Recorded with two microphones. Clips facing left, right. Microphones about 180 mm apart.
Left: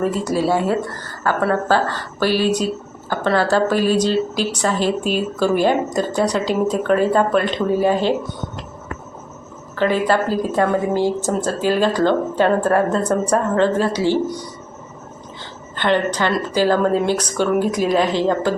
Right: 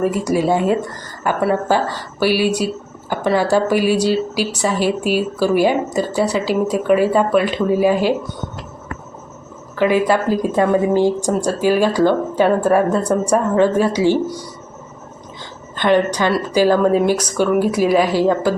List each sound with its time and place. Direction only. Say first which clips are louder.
0.0 s speech: right 2 dB; 15° right (ahead or behind)
9.7 s speech: right 2 dB; 10° right (ahead or behind)
15.7 s speech: right 3 dB; 15° right (ahead or behind)